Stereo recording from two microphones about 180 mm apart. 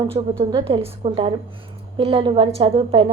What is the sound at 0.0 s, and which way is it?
A woman's voice, 30° right (ahead or behind).